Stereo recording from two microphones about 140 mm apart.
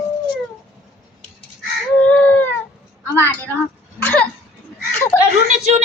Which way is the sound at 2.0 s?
10° left (ahead or behind).